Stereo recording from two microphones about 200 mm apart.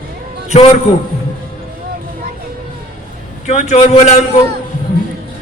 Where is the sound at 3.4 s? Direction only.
35° left (ahead or behind).